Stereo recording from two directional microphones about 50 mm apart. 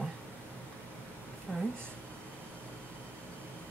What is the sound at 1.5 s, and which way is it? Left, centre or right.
Speech, centre.